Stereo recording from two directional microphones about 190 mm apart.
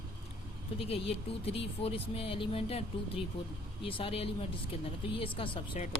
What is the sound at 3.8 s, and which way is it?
Speech, 30° left (ahead or behind).